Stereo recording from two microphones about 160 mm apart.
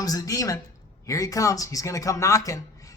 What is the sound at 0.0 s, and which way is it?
Speech, 20° left (ahead or behind).